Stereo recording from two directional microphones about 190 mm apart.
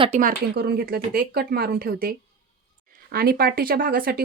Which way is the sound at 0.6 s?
55° right (ahead or behind).